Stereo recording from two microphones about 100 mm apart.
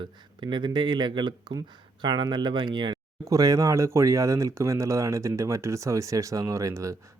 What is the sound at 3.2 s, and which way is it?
Speech, 35° right (ahead or behind).